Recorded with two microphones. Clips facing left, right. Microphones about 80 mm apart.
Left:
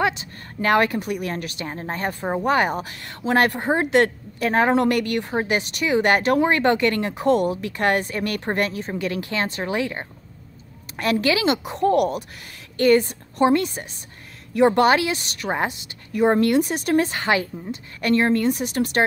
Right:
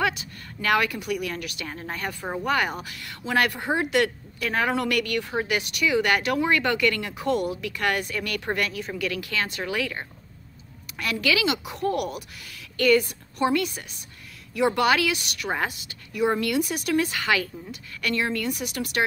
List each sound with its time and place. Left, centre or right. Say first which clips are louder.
0.0 s a woman's voice: left 3 dB; left
16.2 s a woman's voice: left 6 dB; left